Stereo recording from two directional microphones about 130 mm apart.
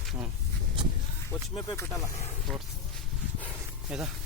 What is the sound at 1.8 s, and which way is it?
Speech, 20° left (ahead or behind).